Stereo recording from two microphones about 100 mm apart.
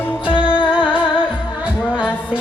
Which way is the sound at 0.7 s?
10° right (ahead or behind).